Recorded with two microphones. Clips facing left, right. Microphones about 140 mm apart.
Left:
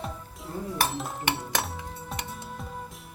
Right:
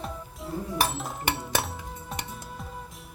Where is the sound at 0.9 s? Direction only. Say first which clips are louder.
Even; centre (ahead or behind).